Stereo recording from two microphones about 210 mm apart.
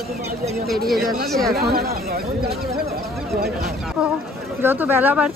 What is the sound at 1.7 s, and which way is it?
Speech, 45° right (ahead or behind).